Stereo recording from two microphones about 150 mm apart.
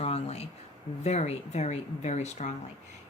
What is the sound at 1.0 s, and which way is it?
A woman's voice, 45° left (ahead or behind).